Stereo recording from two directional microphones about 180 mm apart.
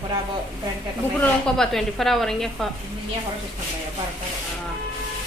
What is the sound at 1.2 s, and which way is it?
A woman's voice, centre (ahead or behind).